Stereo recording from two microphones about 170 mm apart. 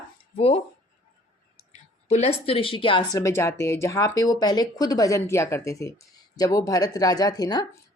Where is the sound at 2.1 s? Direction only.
35° left (ahead or behind).